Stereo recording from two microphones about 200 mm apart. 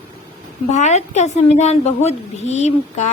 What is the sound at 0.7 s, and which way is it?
A woman's voice, 35° left (ahead or behind).